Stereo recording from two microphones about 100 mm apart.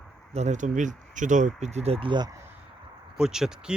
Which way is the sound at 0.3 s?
90° right.